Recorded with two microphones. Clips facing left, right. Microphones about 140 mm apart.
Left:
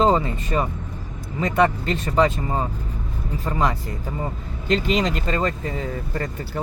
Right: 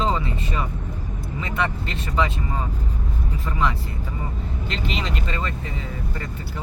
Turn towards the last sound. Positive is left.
turn(degrees=45)  # may be behind; listen again after turning